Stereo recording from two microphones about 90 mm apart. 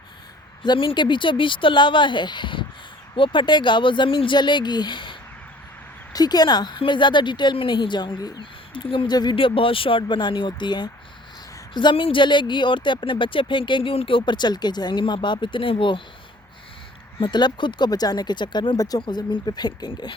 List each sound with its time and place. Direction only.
0.6 s speech: 65° left (ahead or behind)
6.1 s speech: 50° left (ahead or behind); by 9.0 s 75° left (ahead or behind)
9.0 s speech: 55° left (ahead or behind)
9.3 s speech: 80° left
17.2 s speech: 55° left (ahead or behind)
18.8 s speech: 45° left (ahead or behind)
19.0 s speech: 60° left (ahead or behind)